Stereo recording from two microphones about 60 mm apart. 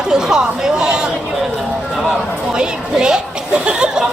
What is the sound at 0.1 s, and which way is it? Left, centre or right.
Chatter, centre.